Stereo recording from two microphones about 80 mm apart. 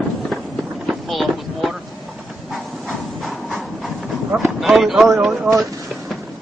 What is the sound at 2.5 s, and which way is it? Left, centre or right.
Train, centre.